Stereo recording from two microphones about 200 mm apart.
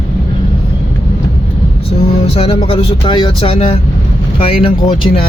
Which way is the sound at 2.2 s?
30° left (ahead or behind).